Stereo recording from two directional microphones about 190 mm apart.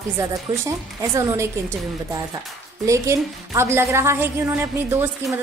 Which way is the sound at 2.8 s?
15° right (ahead or behind).